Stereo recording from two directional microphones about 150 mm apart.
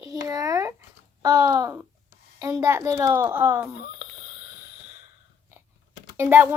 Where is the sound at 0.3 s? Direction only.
25° right (ahead or behind).